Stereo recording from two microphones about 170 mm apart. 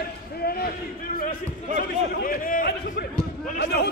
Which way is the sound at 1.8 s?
60° left (ahead or behind).